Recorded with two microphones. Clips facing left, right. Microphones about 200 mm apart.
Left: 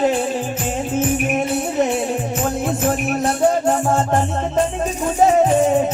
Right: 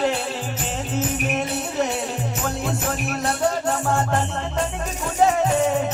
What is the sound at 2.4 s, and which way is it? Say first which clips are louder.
Music: left 5 dB; 20° left (ahead or behind).